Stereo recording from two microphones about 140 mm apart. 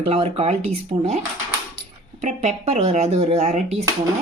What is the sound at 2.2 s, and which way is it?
Speech, 55° right (ahead or behind).